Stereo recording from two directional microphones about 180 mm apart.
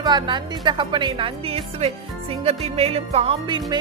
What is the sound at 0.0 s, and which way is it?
Speech, 25° right (ahead or behind).